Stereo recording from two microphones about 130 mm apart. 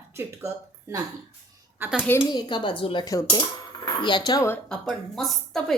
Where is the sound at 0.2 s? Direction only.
20° right (ahead or behind).